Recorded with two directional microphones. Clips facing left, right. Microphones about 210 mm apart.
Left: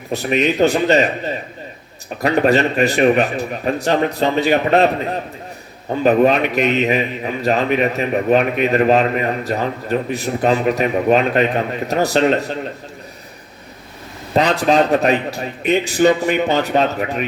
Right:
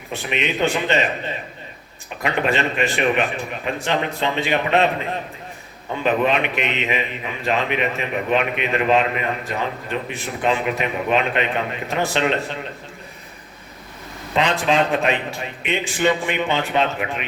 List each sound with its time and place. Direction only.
0.1 s a man's voice: 40° left (ahead or behind)
5.9 s a man's voice: 40° left (ahead or behind)
14.3 s a man's voice: 40° left (ahead or behind)